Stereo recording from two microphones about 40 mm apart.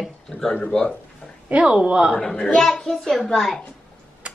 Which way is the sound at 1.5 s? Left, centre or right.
Right.